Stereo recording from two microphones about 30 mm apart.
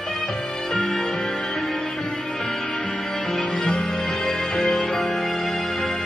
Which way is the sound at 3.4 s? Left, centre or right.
Left.